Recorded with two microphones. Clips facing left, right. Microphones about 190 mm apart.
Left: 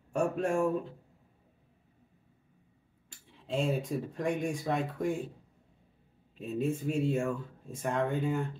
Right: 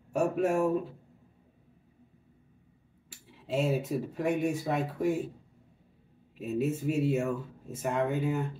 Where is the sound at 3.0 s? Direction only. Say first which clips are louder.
Right 2 dB; 5° right (ahead or behind).